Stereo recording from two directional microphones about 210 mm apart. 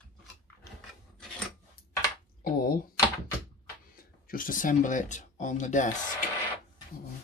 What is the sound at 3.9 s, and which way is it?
Speech, 40° left (ahead or behind).